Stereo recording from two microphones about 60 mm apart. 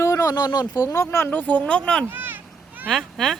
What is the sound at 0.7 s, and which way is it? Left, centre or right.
Speech, left.